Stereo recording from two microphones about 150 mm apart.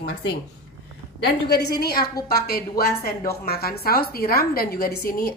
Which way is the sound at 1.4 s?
90° left.